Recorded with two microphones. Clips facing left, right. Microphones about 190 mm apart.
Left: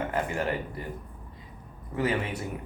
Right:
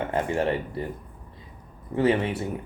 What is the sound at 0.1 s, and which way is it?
Speech, 30° right (ahead or behind).